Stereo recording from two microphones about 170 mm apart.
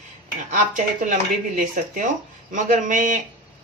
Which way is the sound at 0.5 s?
50° right (ahead or behind).